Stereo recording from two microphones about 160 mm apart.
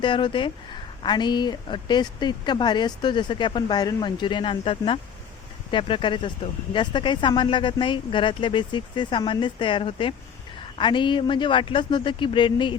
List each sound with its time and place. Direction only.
0.0 s speech: 30° left (ahead or behind)